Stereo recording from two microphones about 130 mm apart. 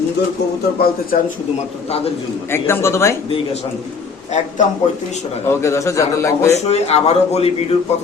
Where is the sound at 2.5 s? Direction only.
20° left (ahead or behind).